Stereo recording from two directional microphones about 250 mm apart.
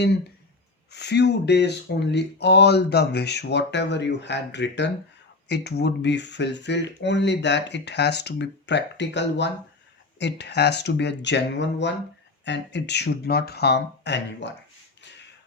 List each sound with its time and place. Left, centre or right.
0.9 s speech: left